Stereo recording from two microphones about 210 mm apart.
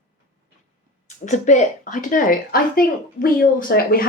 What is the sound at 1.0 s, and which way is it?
A woman's voice, 35° left (ahead or behind).